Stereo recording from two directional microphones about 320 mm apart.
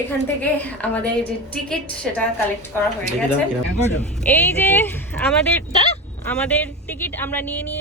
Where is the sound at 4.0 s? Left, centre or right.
Centre.